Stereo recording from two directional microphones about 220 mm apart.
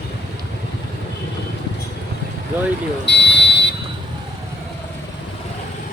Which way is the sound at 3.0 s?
50° left (ahead or behind).